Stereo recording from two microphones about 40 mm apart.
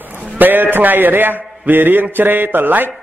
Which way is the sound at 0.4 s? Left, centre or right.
Right.